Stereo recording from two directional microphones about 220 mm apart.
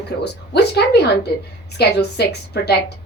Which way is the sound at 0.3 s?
50° left (ahead or behind).